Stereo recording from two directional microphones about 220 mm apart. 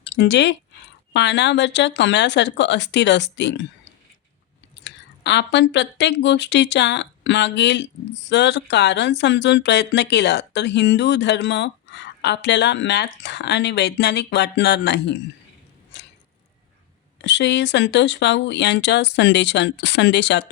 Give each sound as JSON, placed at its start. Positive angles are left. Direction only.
{"t": 0.0, "sound": "speech", "side_deg": 55}
{"t": 4.7, "sound": "speech", "side_deg": 55}
{"t": 15.9, "sound": "a sound", "side_deg": 50}
{"t": 17.2, "sound": "speech", "side_deg": 55}